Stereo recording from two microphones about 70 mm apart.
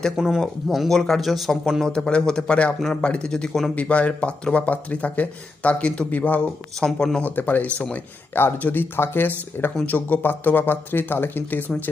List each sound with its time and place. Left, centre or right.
0.2 s speech: centre
3.8 s speech: centre
6.7 s speech: centre
7.2 s speech: left